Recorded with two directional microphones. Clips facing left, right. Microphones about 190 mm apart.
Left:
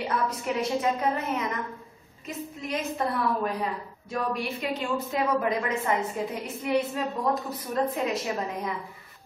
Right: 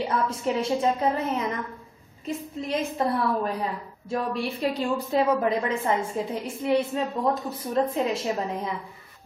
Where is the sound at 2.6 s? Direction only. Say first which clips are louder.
Right 3 dB; 30° right (ahead or behind).